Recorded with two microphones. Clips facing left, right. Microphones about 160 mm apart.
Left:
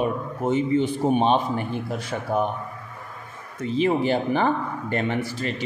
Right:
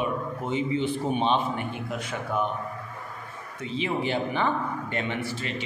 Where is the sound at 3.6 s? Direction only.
45° left (ahead or behind).